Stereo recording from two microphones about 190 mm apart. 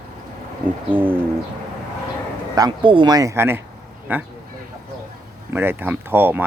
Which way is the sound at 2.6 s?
25° right (ahead or behind).